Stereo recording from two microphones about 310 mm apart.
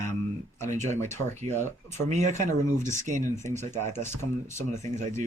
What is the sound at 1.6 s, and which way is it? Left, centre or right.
Speech, right.